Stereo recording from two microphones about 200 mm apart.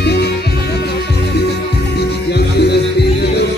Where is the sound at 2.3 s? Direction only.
55° left (ahead or behind).